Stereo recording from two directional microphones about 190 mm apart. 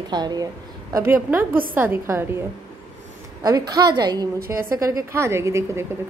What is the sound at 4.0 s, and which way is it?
A woman's voice, 20° right (ahead or behind).